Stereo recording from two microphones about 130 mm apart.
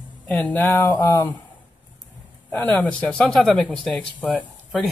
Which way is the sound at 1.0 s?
30° left (ahead or behind).